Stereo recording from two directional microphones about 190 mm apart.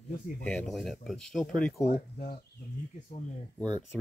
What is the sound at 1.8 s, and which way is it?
Speech, 35° left (ahead or behind).